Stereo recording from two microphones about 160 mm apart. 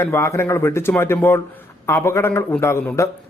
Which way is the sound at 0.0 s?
15° left (ahead or behind).